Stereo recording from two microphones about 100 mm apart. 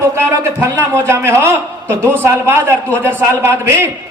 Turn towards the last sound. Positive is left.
turn(degrees=-25)  # may be behind; listen again after turning